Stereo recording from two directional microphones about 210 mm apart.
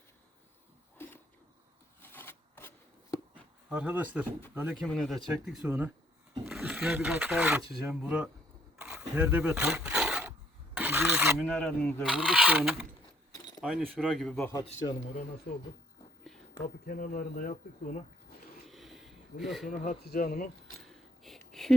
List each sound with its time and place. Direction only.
0.9 s a sound: 10° left (ahead or behind)
3.7 s speech: 5° right (ahead or behind)
8.8 s a sound: 10° right (ahead or behind)
10.8 s rub: 10° right (ahead or behind)
11.4 s speech: 5° left (ahead or behind)
12.0 s speech: 5° right (ahead or behind)
14.5 s a man's voice: 30° left (ahead or behind)
15.5 s speech: 40° left (ahead or behind)
16.6 s speech: 40° left (ahead or behind)
18.7 s a sound: centre (ahead or behind)
19.7 s speech: 40° left (ahead or behind)
20.8 s a sound: centre (ahead or behind)